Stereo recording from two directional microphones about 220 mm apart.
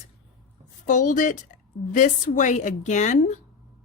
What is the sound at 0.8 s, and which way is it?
Speech, 35° left (ahead or behind).